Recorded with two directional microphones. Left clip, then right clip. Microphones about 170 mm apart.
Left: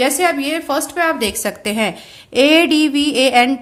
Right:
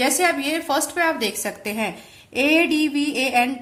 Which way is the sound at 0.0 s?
20° left (ahead or behind).